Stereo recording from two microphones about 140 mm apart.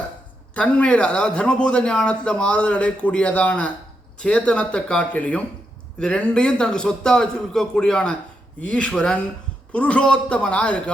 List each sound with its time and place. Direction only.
0.5 s a man's voice: 10° left (ahead or behind)